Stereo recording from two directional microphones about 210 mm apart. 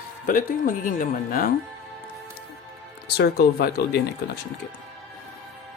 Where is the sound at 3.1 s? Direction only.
50° left (ahead or behind).